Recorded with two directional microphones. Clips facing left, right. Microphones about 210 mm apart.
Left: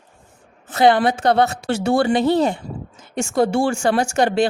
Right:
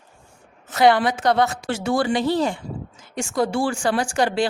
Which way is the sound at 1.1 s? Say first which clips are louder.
Left 3 dB; 30° left (ahead or behind).